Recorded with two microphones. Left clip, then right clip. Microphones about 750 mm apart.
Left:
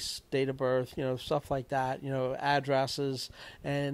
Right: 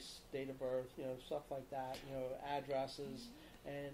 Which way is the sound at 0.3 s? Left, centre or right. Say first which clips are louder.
Left 13 dB; left.